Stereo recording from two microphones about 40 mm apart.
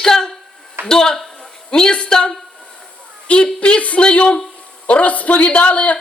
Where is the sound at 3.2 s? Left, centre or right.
Left.